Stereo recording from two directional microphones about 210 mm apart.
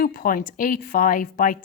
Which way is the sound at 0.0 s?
40° left (ahead or behind).